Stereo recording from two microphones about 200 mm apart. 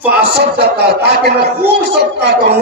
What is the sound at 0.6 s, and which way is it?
Speech, 55° right (ahead or behind).